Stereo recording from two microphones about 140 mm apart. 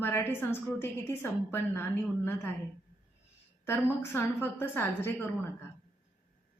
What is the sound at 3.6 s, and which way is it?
A woman's voice, 15° left (ahead or behind).